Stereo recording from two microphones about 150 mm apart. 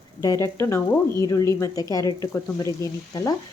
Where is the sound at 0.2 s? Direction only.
20° left (ahead or behind).